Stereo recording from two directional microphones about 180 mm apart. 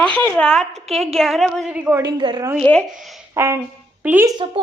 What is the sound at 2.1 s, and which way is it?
Speech, 25° right (ahead or behind).